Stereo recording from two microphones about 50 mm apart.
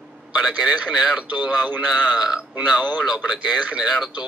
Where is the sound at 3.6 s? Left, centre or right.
Right.